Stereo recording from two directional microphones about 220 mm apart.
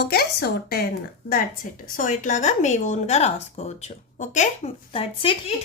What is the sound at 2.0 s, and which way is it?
Speech, 35° left (ahead or behind).